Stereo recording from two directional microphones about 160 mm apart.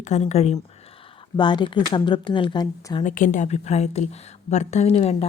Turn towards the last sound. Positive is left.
turn(degrees=40)  # may be behind; listen again after turning